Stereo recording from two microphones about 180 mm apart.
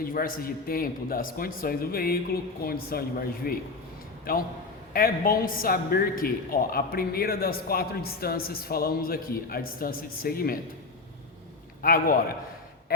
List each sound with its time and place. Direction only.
0.0 s a man's voice: 50° left (ahead or behind)
11.8 s a man's voice: 55° left (ahead or behind)